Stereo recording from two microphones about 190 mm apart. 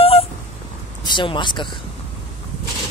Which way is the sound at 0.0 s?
30° left (ahead or behind).